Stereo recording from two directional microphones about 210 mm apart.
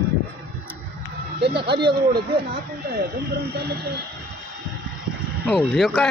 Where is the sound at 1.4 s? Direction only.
50° right (ahead or behind).